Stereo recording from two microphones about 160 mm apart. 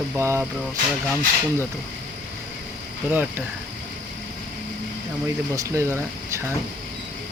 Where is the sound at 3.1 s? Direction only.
10° right (ahead or behind).